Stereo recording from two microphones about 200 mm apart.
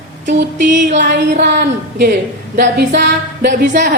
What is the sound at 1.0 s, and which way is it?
Music, 55° right (ahead or behind).